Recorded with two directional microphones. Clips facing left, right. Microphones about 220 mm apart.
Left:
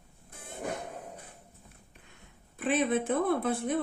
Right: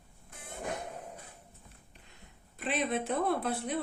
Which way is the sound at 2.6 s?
50° left (ahead or behind).